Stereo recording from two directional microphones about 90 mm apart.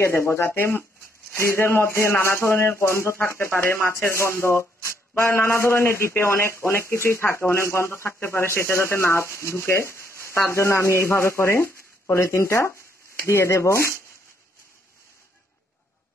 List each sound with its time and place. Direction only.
0.0 s speech: 25° left (ahead or behind)